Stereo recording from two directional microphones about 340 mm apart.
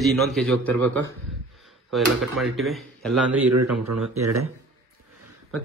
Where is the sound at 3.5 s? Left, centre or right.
Right.